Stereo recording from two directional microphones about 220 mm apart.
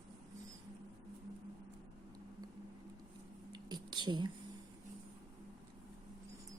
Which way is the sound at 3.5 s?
20° right (ahead or behind).